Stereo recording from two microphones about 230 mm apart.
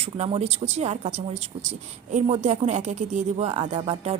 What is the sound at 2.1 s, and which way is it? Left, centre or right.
Speech, right.